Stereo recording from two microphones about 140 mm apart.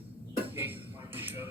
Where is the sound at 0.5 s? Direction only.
15° right (ahead or behind).